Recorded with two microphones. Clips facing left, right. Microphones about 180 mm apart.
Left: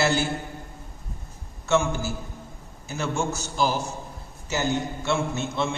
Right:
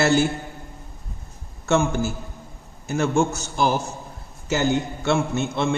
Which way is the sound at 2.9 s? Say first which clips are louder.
Right 7 dB; 55° right (ahead or behind).